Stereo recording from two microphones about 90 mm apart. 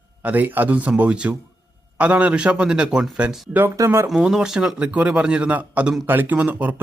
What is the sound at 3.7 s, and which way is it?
Speech, 30° right (ahead or behind).